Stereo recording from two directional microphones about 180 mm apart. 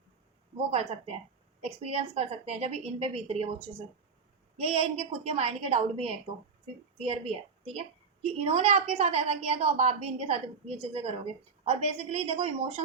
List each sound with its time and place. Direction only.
0.5 s a woman's voice: 35° right (ahead or behind)